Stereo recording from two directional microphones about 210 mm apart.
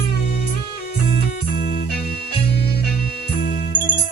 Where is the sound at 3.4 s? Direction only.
50° left (ahead or behind).